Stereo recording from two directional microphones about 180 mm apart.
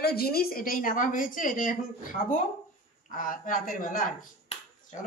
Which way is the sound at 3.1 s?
50° left (ahead or behind).